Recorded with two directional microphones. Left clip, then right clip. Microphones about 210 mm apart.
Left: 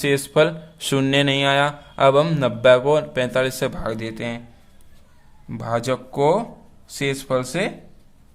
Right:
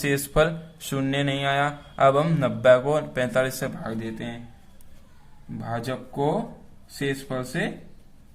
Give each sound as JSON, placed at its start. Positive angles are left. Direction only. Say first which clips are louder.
{"t": 0.0, "sound": "speech", "louder": "left 4 dB", "side_deg": 20}
{"t": 3.8, "sound": "speech", "louder": "left 6 dB", "side_deg": 40}
{"t": 5.5, "sound": "speech", "louder": "left 8 dB", "side_deg": 40}